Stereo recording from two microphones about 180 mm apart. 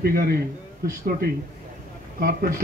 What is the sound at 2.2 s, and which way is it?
Speech, 50° right (ahead or behind).